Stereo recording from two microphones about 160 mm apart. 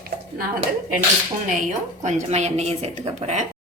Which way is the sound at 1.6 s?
50° right (ahead or behind).